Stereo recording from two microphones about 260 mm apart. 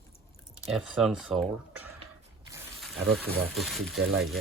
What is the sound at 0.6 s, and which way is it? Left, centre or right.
Speech, centre.